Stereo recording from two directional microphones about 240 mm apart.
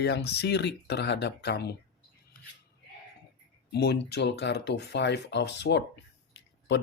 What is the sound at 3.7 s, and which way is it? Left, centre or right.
Speech, left.